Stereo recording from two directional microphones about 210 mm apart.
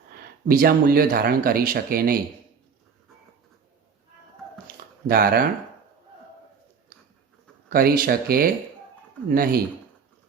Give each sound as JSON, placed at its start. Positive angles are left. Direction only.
{"t": 0.2, "sound": "speech", "side_deg": -45}
{"t": 5.0, "sound": "speech", "side_deg": -45}
{"t": 6.9, "sound": "a sound", "side_deg": -45}
{"t": 7.7, "sound": "speech", "side_deg": -45}